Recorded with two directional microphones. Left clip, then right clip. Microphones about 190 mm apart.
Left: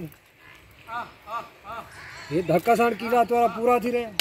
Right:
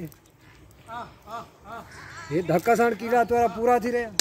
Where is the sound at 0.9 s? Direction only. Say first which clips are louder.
Left 4 dB; 50° left (ahead or behind).